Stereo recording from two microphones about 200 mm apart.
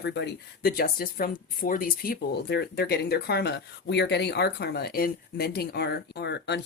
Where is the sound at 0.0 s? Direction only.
60° left (ahead or behind).